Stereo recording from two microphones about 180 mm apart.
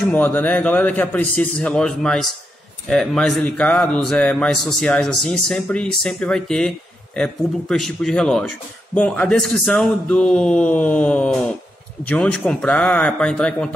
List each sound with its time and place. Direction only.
0.1 s a man's voice: 10° left (ahead or behind)